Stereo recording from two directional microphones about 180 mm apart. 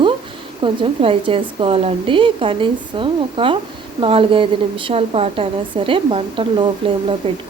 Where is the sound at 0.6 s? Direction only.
30° right (ahead or behind).